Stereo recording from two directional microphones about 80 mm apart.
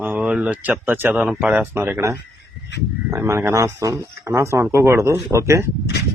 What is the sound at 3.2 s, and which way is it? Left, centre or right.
A man's voice, right.